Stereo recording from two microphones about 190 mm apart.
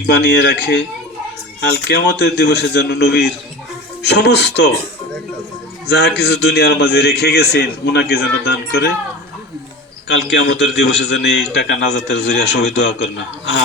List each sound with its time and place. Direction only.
0.1 s a man's voice: 65° left (ahead or behind)
5.9 s a man's voice: 60° left (ahead or behind)
10.1 s a man's voice: 65° left (ahead or behind)